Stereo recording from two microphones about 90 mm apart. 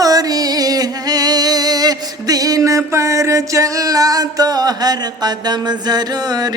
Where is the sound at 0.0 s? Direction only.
45° right (ahead or behind).